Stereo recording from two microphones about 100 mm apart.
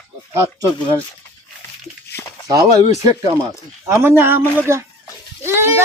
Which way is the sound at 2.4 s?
35° right (ahead or behind).